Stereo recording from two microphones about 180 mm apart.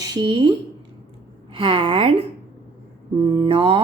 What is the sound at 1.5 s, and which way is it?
Speech, 30° right (ahead or behind).